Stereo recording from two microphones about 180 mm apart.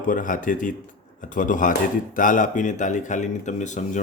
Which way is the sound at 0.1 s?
45° left (ahead or behind).